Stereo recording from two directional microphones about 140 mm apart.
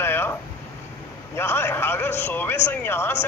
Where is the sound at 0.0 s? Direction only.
15° left (ahead or behind).